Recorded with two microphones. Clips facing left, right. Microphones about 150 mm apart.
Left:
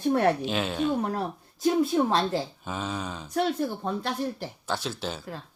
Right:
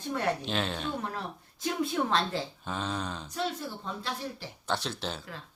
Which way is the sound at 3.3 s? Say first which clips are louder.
Left 9 dB; 60° left (ahead or behind).